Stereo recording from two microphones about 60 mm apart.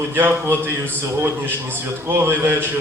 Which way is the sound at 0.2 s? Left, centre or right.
Right.